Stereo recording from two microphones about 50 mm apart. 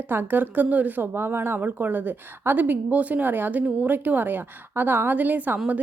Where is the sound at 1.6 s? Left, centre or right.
Right.